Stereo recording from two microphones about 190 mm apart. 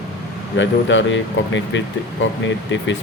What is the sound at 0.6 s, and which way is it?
Speech, 80° left.